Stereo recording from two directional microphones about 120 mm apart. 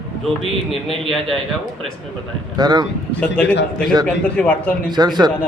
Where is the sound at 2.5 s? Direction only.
35° right (ahead or behind).